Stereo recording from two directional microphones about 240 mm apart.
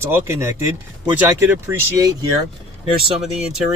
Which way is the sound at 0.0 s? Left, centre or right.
Centre.